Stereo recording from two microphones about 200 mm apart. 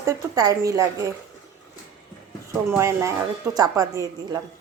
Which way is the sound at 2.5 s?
15° right (ahead or behind).